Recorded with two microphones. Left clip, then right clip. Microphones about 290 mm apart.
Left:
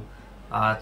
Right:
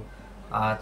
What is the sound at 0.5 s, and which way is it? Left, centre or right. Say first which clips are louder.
Speech: left 2 dB; centre.